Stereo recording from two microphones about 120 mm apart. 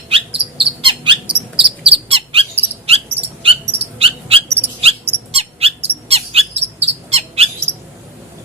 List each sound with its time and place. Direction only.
0.3 s cricket: 50° right (ahead or behind)
6.1 s squawk: 60° right (ahead or behind)